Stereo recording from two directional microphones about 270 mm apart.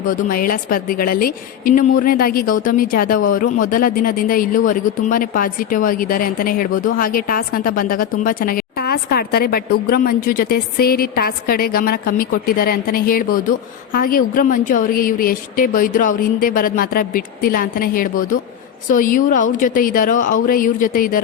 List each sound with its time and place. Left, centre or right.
0.1 s speech: left